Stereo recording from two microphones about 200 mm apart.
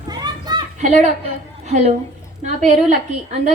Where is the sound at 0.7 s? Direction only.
35° right (ahead or behind).